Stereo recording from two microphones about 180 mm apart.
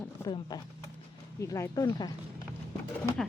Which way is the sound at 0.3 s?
25° left (ahead or behind).